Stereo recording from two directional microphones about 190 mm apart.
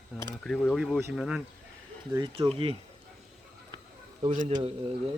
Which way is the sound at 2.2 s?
30° right (ahead or behind).